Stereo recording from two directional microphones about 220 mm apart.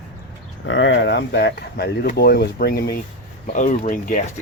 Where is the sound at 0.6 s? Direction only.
55° left (ahead or behind); by 4.2 s 35° left (ahead or behind).